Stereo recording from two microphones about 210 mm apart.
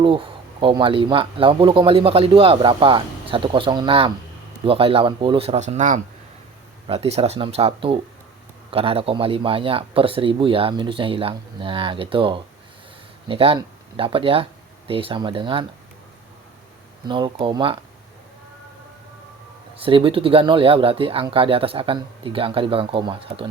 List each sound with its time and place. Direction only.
0.0 s speech: 25° right (ahead or behind)
17.1 s speech: 25° right (ahead or behind)
19.7 s speech: 25° right (ahead or behind)